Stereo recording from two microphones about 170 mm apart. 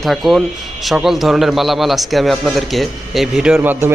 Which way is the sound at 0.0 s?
Centre (ahead or behind).